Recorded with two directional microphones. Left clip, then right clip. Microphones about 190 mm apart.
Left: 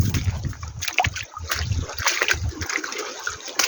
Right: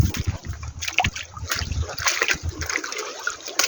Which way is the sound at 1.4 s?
Centre (ahead or behind).